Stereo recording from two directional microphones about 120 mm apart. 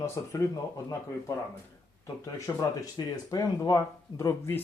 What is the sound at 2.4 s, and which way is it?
Speech, 30° left (ahead or behind).